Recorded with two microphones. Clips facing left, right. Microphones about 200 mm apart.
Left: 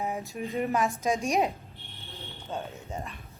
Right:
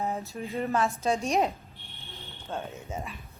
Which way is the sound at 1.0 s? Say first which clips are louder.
Even; 15° left (ahead or behind).